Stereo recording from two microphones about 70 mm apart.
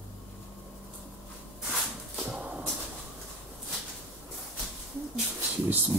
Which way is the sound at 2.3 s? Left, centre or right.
Centre.